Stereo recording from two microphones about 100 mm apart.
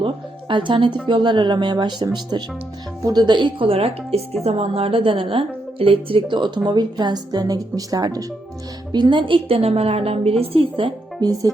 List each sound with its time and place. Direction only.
0.0 s a woman's voice: 55° right (ahead or behind); by 8.2 s 40° right (ahead or behind)
8.9 s a woman's voice: 50° right (ahead or behind); by 10.3 s 85° right
10.4 s speech: 70° right (ahead or behind)
11.2 s speech: 40° right (ahead or behind)